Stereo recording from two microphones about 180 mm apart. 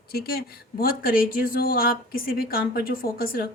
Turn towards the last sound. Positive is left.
turn(degrees=55)  # may be behind; listen again after turning